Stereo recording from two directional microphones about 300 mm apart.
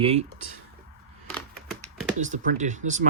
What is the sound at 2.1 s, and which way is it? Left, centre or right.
Speech, right.